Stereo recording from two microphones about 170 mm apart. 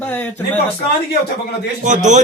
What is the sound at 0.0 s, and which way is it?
Speech, 10° left (ahead or behind).